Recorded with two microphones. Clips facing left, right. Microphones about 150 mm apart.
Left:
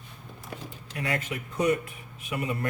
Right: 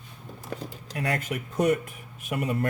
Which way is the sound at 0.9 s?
45° right (ahead or behind).